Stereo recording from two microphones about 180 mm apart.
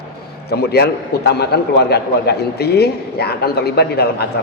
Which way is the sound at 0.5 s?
65° left (ahead or behind).